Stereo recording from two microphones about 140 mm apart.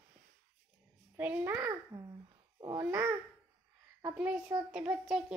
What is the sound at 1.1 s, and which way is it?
Speech, 10° right (ahead or behind).